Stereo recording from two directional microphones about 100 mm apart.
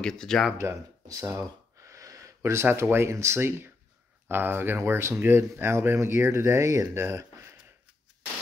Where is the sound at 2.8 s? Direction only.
25° right (ahead or behind).